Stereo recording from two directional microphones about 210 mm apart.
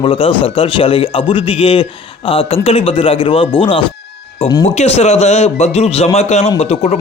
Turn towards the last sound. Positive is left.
turn(degrees=30)  # may be behind; listen again after turning